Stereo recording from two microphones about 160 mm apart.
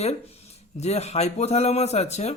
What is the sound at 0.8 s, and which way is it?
Speech, 40° left (ahead or behind).